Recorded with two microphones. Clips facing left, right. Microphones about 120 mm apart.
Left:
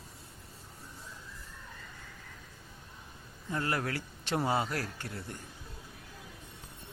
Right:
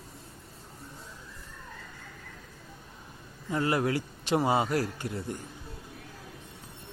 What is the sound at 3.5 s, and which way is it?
A man's voice, 15° right (ahead or behind).